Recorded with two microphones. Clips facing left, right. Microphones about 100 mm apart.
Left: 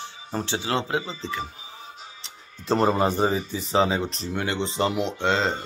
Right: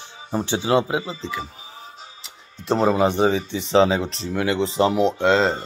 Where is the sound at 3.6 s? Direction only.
30° right (ahead or behind).